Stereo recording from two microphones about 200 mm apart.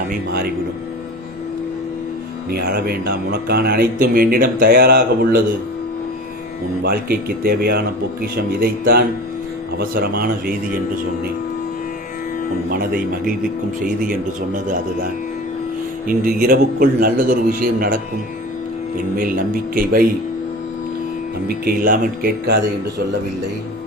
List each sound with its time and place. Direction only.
0.1 s a man's voice: 50° right (ahead or behind)
2.5 s a man's voice: 50° right (ahead or behind)
6.8 s a man's voice: 50° right (ahead or behind)
12.7 s a man's voice: 45° right (ahead or behind)
16.0 s a man's voice: 45° right (ahead or behind)
19.1 s a man's voice: 45° right (ahead or behind)
21.4 s a man's voice: 50° right (ahead or behind)